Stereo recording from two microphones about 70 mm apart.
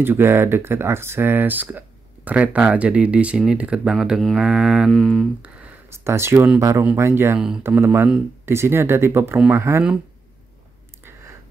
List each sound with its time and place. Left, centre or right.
0.0 s speech: right; by 3.9 s centre
3.9 s mantra: centre
4.9 s speech: centre
5.9 s speech: right
7.3 s mantra: centre
7.6 s speech: right